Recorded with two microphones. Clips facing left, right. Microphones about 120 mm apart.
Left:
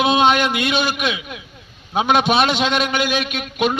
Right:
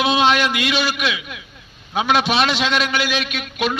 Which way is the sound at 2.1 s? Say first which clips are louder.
Left 2 dB; 50° left (ahead or behind).